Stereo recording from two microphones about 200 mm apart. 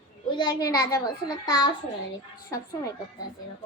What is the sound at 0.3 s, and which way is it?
A child's voice, 20° left (ahead or behind).